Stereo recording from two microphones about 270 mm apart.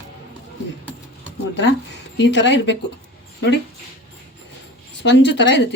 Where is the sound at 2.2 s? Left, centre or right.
Left.